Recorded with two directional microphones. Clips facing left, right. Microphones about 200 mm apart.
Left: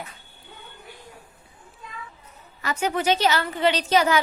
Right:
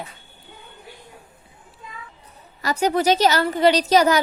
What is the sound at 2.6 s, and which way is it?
A woman's voice, 35° right (ahead or behind).